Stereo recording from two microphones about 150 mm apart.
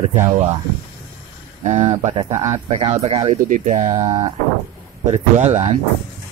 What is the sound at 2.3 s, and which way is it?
Speech, 20° right (ahead or behind).